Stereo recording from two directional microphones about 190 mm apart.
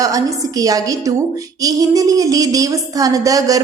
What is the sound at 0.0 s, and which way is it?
A woman's voice, 20° right (ahead or behind).